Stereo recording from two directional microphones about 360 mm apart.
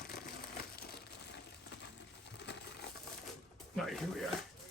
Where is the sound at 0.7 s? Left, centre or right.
Left.